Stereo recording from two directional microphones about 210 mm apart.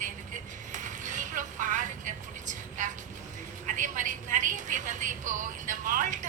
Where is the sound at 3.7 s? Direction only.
40° right (ahead or behind).